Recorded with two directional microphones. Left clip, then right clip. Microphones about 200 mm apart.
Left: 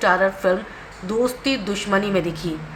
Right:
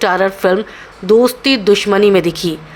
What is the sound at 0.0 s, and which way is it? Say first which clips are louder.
Speech: right 5 dB; 45° right (ahead or behind).